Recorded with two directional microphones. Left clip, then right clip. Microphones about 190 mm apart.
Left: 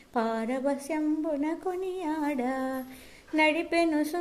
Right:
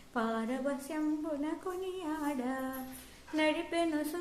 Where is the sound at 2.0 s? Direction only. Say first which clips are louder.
Left 6 dB; 30° left (ahead or behind).